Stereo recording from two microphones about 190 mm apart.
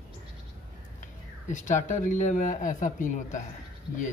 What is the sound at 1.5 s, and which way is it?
A man's voice, 40° left (ahead or behind).